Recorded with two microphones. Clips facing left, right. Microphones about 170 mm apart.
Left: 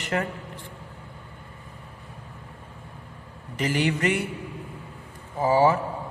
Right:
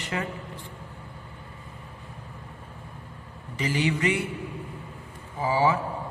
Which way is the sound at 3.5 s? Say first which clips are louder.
Left 2 dB; 55° left (ahead or behind).